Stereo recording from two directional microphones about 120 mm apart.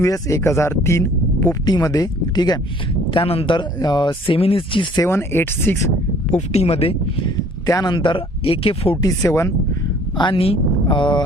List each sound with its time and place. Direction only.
0.0 s speech: 25° left (ahead or behind)
3.1 s speech: 50° left (ahead or behind)
5.0 s speech: 20° left (ahead or behind)
6.3 s speech: 60° left (ahead or behind)
7.7 s speech: 35° left (ahead or behind); by 9.0 s 50° left (ahead or behind)
9.0 s speech: 30° left (ahead or behind)
10.2 s speech: 45° left (ahead or behind)